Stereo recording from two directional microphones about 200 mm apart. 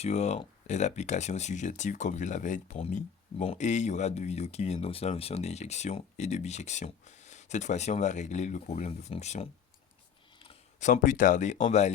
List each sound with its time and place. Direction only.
0.0 s speech: 35° left (ahead or behind)